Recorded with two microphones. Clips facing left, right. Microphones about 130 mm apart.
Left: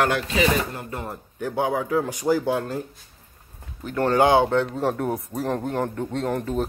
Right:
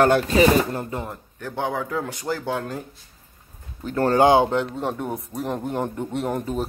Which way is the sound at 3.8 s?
30° right (ahead or behind).